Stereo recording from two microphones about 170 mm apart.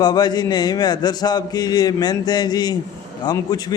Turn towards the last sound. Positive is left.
turn(degrees=25)  # may be behind; listen again after turning